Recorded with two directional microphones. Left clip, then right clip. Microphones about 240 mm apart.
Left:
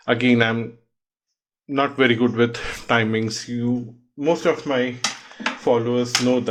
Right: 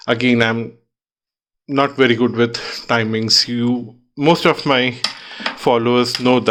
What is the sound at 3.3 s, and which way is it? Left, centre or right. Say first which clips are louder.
Speech: right 10 dB; right.